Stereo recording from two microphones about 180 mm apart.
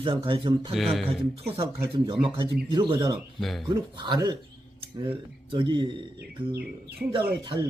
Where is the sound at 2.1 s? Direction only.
30° right (ahead or behind).